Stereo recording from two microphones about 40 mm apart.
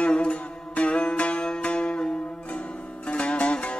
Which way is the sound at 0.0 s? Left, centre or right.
Left.